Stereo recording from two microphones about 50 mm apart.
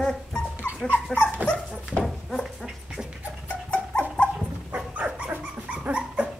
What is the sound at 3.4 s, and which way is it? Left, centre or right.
Dog, left.